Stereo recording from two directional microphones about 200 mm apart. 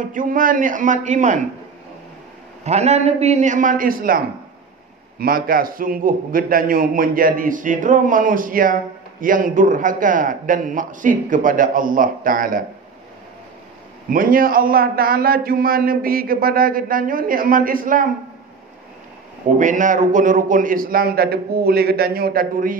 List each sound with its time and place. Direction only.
0.0 s a man's voice: 40° right (ahead or behind)
2.6 s a man's voice: 35° right (ahead or behind)
5.2 s a man's voice: 45° right (ahead or behind)
14.1 s a man's voice: 45° right (ahead or behind)
19.6 s a man's voice: 40° right (ahead or behind)